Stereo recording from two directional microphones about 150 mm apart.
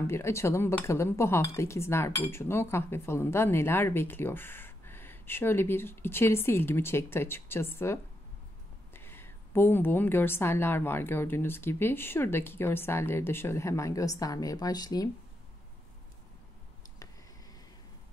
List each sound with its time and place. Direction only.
0.0 s a woman's voice: 20° left (ahead or behind)